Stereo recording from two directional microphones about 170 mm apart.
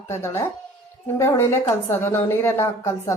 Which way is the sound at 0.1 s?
15° left (ahead or behind).